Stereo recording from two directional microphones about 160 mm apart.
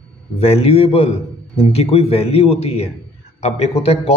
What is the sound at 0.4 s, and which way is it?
A man's voice, 40° left (ahead or behind).